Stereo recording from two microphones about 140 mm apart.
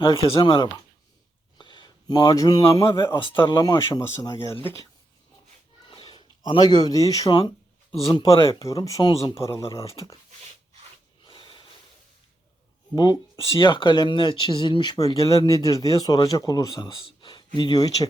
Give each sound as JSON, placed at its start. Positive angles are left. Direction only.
{"t": 0.0, "sound": "a man's voice", "side_deg": 40}
{"t": 4.6, "sound": "speech", "side_deg": 20}
{"t": 5.8, "sound": "a sound", "side_deg": 35}
{"t": 8.0, "sound": "speech", "side_deg": 25}
{"t": 11.3, "sound": "snort", "side_deg": 35}
{"t": 13.0, "sound": "speech", "side_deg": 30}
{"t": 17.1, "sound": "a sound", "side_deg": 35}
{"t": 17.6, "sound": "speech", "side_deg": 30}